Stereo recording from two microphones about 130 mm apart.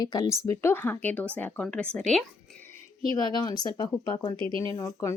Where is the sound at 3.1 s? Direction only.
30° left (ahead or behind).